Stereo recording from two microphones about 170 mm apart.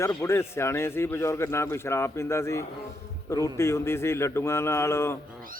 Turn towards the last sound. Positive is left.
turn(degrees=15)  # may be behind; listen again after turning